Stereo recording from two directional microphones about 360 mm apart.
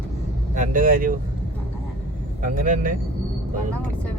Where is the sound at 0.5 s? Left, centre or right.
Right.